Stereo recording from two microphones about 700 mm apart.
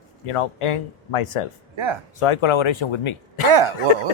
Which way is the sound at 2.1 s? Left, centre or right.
Left.